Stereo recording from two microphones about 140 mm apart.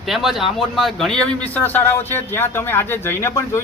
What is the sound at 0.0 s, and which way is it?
A man's voice, centre (ahead or behind).